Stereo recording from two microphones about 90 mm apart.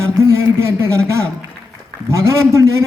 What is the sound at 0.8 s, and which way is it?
A man's voice, 30° right (ahead or behind).